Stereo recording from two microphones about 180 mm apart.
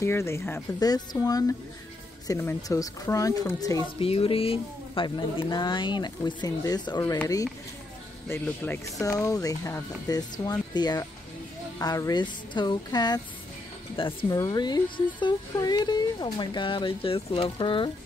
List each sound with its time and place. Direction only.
0.0 s speech: 15° left (ahead or behind)
4.0 s speech: 30° left (ahead or behind)
8.3 s speech: 15° left (ahead or behind)